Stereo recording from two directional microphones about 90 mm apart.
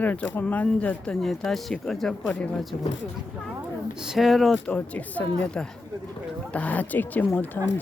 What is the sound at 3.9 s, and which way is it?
Speech, 5° right (ahead or behind).